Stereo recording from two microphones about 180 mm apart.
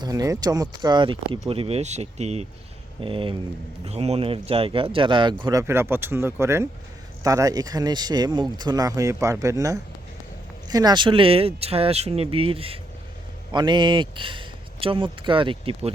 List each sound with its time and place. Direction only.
0.0 s speech: 20° right (ahead or behind)